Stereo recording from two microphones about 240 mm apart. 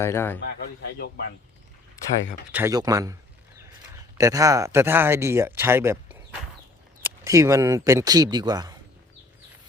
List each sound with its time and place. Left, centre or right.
0.0 s a man's voice: centre
0.9 s speech: left
2.5 s speech: centre